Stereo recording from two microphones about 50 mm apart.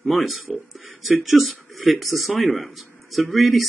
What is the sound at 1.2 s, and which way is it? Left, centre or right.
Speech, centre.